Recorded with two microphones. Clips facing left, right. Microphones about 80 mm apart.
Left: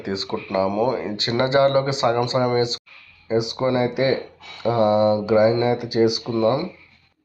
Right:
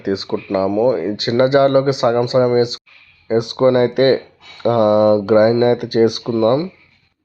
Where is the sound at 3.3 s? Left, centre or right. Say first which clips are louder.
Right 7 dB; right.